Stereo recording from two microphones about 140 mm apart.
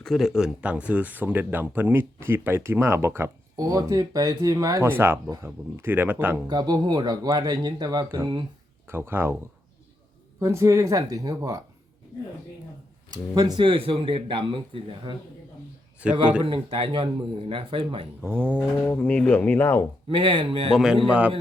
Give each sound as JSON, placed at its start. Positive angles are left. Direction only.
{"t": 0.0, "sound": "speech", "side_deg": 0}
{"t": 6.5, "sound": "speech", "side_deg": -30}
{"t": 8.9, "sound": "speech", "side_deg": -15}
{"t": 10.4, "sound": "speech", "side_deg": -20}
{"t": 13.1, "sound": "speech", "side_deg": -30}
{"t": 16.0, "sound": "speech", "side_deg": -10}
{"t": 16.4, "sound": "speech", "side_deg": -40}
{"t": 18.2, "sound": "speech", "side_deg": -15}
{"t": 18.9, "sound": "speech", "side_deg": 10}
{"t": 20.1, "sound": "speech", "side_deg": -40}
{"t": 20.7, "sound": "speech", "side_deg": -5}